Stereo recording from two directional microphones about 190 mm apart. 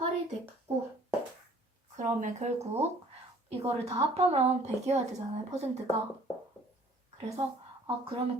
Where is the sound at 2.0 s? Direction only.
40° right (ahead or behind).